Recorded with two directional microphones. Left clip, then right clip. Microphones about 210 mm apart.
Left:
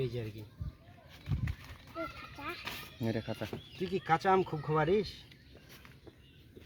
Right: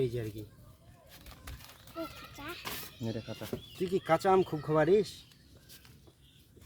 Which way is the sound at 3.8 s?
40° right (ahead or behind).